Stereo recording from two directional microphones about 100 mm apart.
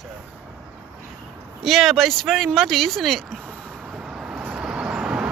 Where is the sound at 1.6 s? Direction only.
Centre (ahead or behind).